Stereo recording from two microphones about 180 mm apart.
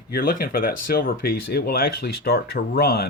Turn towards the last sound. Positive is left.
turn(degrees=60)  # may be behind; listen again after turning